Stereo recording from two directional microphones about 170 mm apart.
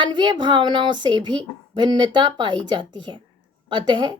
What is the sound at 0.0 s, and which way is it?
A woman's voice, 25° right (ahead or behind).